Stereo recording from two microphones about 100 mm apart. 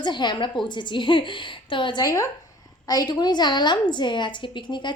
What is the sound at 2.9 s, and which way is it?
A woman's voice, 45° left (ahead or behind).